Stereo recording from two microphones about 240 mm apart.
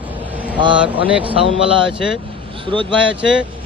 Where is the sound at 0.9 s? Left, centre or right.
Right.